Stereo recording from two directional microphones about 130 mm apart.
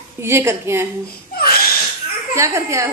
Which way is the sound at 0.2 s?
20° right (ahead or behind).